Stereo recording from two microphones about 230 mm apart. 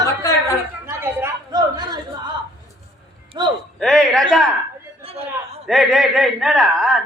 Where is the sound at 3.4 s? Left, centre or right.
Centre.